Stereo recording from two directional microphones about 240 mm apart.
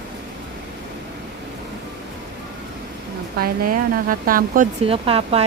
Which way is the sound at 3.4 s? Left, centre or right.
Right.